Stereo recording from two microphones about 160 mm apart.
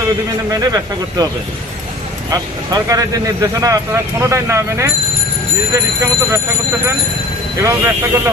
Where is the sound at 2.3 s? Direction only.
20° right (ahead or behind).